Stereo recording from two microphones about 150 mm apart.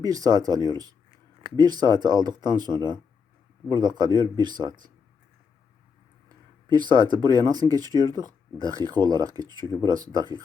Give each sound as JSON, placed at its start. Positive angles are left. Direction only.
{"t": 0.0, "sound": "speech", "side_deg": -25}
{"t": 6.2, "sound": "speech", "side_deg": -30}